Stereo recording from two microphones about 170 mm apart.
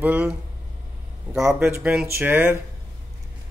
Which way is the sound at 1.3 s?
5° right (ahead or behind).